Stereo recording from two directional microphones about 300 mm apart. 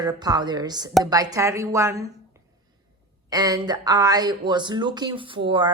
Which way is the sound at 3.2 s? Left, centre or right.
Centre.